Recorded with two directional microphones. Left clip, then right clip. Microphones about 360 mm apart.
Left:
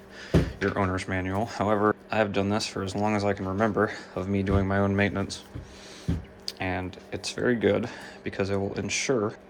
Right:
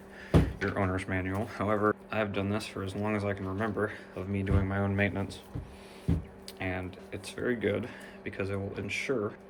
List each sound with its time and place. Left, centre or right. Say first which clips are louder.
0.6 s speech: left 4 dB; centre
6.4 s speech: left 7 dB; centre